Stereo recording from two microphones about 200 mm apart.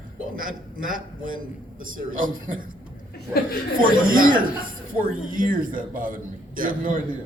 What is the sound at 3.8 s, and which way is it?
A man's voice, 45° right (ahead or behind).